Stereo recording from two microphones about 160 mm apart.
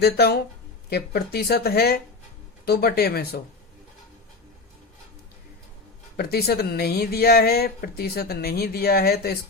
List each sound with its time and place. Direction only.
0.0 s speech: 85° left
6.1 s speech: 85° left